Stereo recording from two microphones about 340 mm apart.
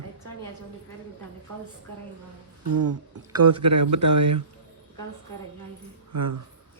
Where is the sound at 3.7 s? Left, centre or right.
Right.